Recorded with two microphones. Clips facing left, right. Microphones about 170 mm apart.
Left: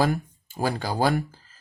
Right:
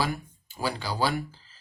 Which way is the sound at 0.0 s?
50° left (ahead or behind).